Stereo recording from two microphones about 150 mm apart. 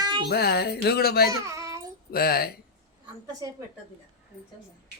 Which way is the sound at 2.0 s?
90° left.